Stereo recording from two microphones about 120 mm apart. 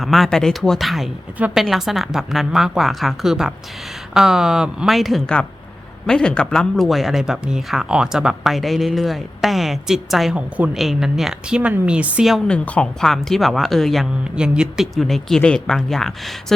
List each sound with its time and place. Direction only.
0.0 s a woman's voice: centre (ahead or behind)
12.5 s speech: 10° left (ahead or behind)